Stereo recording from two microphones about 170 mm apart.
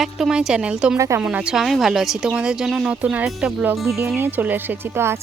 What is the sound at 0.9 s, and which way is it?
Speech, 15° right (ahead or behind).